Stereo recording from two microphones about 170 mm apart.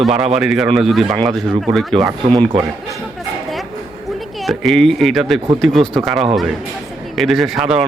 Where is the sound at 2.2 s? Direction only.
30° right (ahead or behind).